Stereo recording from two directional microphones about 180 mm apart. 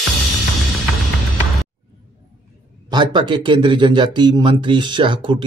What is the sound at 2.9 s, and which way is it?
Speech, 25° right (ahead or behind).